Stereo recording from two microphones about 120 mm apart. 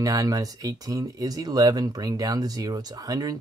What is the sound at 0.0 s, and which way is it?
Speech, 30° right (ahead or behind).